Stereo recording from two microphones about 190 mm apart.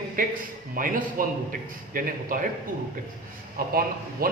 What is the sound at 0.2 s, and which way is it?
A man's voice, 45° right (ahead or behind).